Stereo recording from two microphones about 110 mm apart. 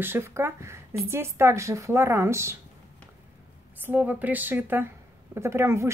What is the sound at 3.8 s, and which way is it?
Speech, 15° right (ahead or behind).